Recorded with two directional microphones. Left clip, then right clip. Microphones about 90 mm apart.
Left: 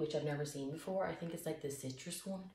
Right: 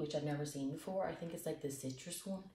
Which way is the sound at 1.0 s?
35° left (ahead or behind).